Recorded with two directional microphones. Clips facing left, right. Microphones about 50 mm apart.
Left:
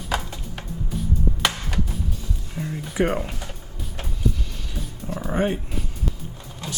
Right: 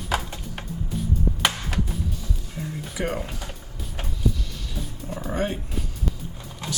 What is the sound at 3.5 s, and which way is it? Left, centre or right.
Music, centre.